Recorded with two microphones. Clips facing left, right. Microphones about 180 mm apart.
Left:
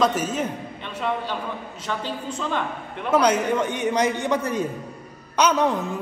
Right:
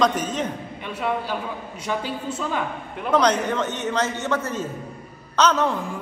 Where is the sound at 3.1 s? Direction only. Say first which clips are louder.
Left 1 dB; 10° left (ahead or behind).